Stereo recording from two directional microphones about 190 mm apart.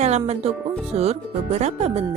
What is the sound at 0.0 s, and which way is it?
Speech, 35° right (ahead or behind).